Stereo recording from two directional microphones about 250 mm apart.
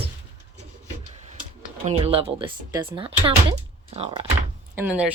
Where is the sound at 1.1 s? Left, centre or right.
Right.